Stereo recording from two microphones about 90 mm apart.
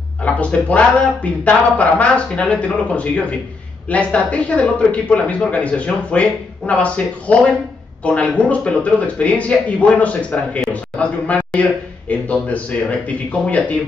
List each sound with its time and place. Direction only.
0.2 s a man's voice: 15° left (ahead or behind)